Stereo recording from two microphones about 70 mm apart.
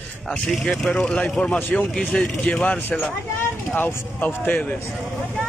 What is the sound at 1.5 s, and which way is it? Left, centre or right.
Speech, left.